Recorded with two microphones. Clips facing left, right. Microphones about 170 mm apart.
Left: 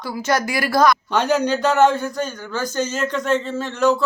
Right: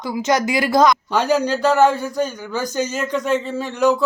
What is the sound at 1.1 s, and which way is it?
A man's voice, 5° right (ahead or behind).